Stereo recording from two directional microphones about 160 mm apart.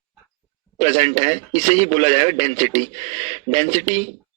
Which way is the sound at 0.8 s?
45° right (ahead or behind).